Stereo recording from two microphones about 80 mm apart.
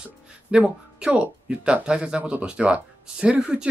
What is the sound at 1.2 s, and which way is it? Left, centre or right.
Speech, centre.